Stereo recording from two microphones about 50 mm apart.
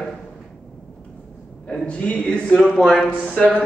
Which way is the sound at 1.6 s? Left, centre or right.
Left.